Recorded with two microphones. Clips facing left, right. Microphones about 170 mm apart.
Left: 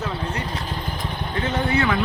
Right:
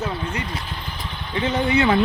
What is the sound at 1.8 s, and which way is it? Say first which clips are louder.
Speech: right 5 dB; 30° right (ahead or behind).